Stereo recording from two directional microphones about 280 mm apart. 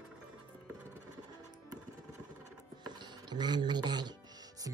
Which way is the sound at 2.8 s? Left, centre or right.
Centre.